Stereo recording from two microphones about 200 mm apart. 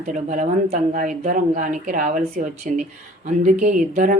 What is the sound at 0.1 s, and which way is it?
Speech, 40° right (ahead or behind).